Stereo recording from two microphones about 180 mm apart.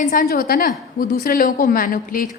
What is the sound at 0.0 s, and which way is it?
A woman's voice, 50° left (ahead or behind).